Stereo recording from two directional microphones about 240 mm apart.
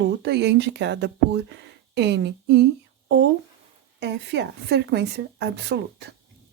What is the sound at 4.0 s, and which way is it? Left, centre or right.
Speech, right.